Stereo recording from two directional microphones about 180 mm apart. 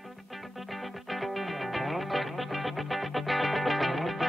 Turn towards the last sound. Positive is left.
turn(degrees=0)  # may be behind; listen again after turning